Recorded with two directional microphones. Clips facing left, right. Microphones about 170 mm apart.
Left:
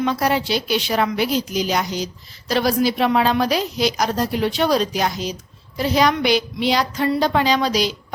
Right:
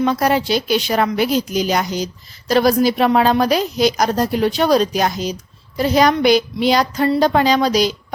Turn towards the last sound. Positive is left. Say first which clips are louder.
# right 4 dB
turn(degrees=-45)  # may be behind; listen again after turning